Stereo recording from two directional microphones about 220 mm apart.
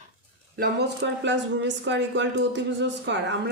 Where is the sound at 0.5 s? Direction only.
45° right (ahead or behind).